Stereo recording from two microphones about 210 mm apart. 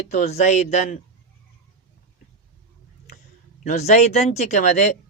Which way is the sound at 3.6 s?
35° left (ahead or behind).